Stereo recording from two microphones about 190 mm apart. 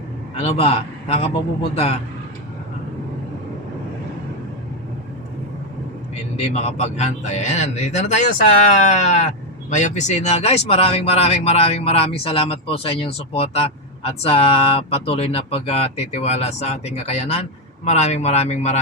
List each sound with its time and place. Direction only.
0.3 s a man's voice: 35° left (ahead or behind)
6.3 s speech: 35° left (ahead or behind)